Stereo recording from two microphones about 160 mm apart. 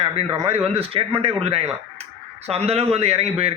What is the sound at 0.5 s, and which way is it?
A man's voice, 40° right (ahead or behind).